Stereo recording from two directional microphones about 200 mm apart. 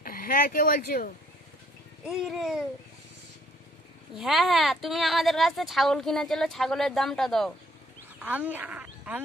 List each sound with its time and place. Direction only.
0.0 s speech: 45° left (ahead or behind)
2.0 s speech: centre (ahead or behind)
4.1 s speech: centre (ahead or behind)